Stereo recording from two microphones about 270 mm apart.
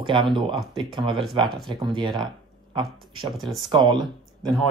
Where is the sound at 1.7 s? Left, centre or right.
Centre.